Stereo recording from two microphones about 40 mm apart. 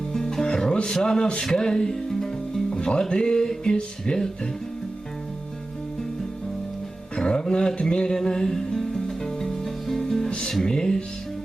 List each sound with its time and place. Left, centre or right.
0.1 s music: centre
0.9 s speech: centre
1.4 s music: centre
2.6 s music: left
7.2 s music: centre
10.2 s music: left
10.6 s speech: centre